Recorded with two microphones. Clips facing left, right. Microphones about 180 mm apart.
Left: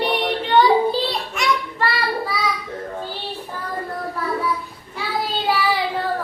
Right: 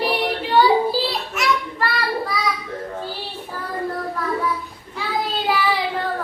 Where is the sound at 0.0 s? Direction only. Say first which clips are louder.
Left 1 dB; centre (ahead or behind).